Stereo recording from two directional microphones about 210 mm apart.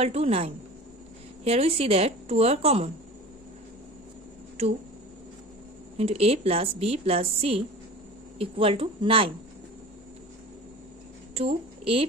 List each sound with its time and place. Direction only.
0.0 s a woman's voice: 30° right (ahead or behind)
4.6 s speech: 30° right (ahead or behind)
5.9 s a woman's voice: 30° right (ahead or behind)
11.3 s a woman's voice: 25° right (ahead or behind)